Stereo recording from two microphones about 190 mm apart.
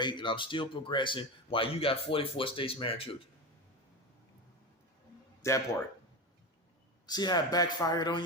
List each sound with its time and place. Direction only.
0.0 s a man's voice: 25° left (ahead or behind)
5.4 s speech: 15° left (ahead or behind)
7.1 s a man's voice: 20° left (ahead or behind)